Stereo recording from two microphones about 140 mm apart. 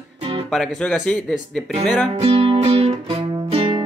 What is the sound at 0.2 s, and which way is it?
Music, 40° right (ahead or behind).